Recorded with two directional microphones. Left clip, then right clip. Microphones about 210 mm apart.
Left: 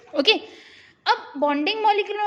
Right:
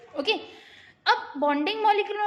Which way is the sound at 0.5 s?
20° left (ahead or behind).